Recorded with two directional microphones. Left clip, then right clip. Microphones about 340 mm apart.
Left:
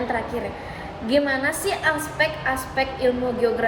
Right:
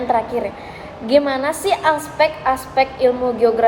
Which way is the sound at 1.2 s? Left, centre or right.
Centre.